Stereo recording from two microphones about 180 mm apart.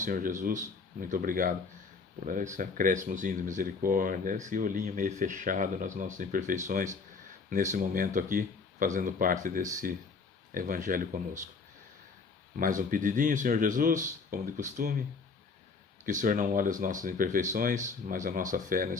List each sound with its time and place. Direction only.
0.0 s speech: 50° right (ahead or behind)
12.5 s speech: 50° right (ahead or behind)
16.0 s speech: 45° right (ahead or behind)